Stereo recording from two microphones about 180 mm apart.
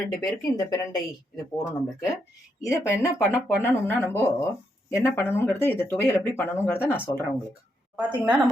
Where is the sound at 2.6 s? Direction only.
15° left (ahead or behind).